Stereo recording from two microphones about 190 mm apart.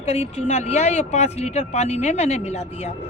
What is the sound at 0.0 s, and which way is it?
Speech, 35° left (ahead or behind).